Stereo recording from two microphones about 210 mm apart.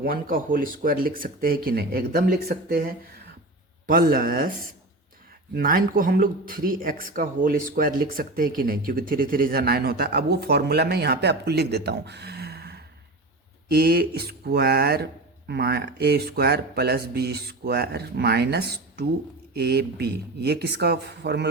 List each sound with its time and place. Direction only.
0.0 s speech: 40° right (ahead or behind)